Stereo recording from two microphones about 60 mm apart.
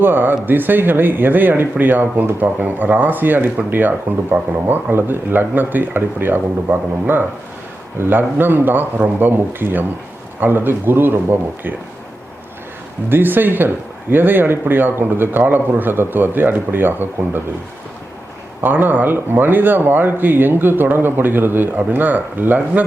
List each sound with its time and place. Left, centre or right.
0.0 s speech: right
13.1 s speech: right
18.6 s speech: right